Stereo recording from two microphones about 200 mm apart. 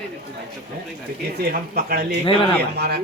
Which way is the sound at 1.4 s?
45° right (ahead or behind).